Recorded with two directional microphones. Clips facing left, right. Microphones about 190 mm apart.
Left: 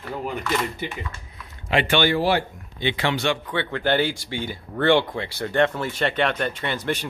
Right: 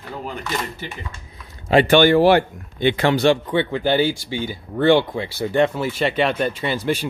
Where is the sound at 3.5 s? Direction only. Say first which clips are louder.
Right 4 dB; 15° right (ahead or behind).